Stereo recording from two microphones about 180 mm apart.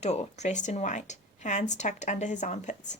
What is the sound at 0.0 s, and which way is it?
Speech, 40° left (ahead or behind).